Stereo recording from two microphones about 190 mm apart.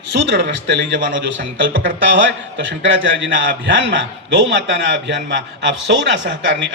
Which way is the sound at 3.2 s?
75° right (ahead or behind).